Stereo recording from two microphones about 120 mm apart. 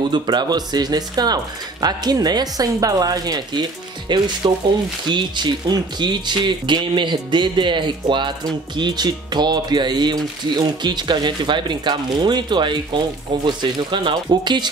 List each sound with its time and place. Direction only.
0.1 s speech: 35° right (ahead or behind)